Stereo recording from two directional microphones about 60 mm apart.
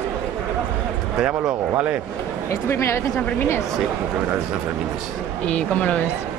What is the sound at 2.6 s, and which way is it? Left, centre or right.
Speech, left.